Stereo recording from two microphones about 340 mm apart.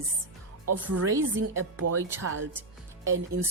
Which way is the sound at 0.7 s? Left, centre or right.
Right.